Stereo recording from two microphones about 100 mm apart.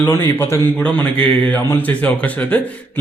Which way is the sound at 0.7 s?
10° left (ahead or behind).